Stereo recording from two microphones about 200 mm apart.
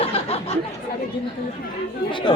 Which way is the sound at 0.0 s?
30° left (ahead or behind).